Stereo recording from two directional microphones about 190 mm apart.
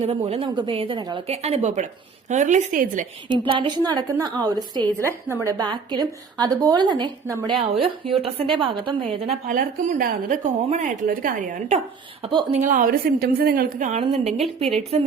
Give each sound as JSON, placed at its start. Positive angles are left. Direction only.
{"t": 0.1, "sound": "a woman's voice", "side_deg": -30}
{"t": 3.2, "sound": "a woman's voice", "side_deg": -25}
{"t": 9.5, "sound": "a woman's voice", "side_deg": -40}
{"t": 12.2, "sound": "a woman's voice", "side_deg": -25}